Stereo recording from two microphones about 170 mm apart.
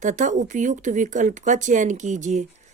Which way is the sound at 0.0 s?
45° right (ahead or behind).